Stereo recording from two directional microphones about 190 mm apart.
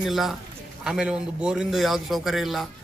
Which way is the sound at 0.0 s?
Centre (ahead or behind).